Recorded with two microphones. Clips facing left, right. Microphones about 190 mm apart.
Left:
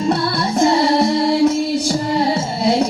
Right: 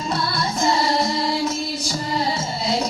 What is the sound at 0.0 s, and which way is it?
Music, 60° left (ahead or behind).